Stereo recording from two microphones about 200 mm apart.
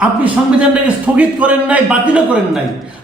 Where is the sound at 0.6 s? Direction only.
5° right (ahead or behind).